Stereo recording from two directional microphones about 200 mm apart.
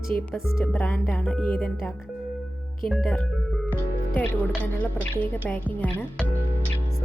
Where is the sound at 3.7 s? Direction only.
5° left (ahead or behind).